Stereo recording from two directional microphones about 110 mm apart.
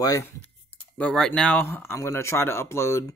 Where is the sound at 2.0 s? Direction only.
25° left (ahead or behind).